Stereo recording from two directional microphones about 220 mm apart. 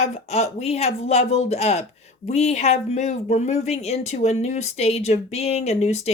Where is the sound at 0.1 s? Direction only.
30° left (ahead or behind).